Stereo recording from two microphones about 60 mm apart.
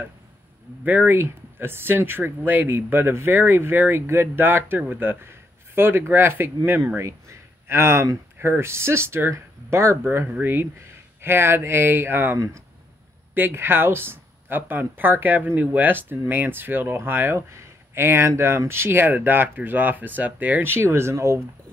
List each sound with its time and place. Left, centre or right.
0.8 s speech: right
7.0 s speech: right
10.4 s speech: right
17.5 s speech: right
20.7 s speech: right